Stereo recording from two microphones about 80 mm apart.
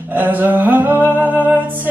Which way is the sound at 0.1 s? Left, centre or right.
Right.